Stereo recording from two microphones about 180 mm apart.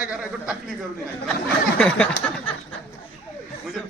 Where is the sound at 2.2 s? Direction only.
10° left (ahead or behind).